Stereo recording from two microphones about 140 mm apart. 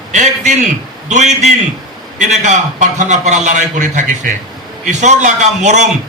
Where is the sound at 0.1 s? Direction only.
60° right (ahead or behind).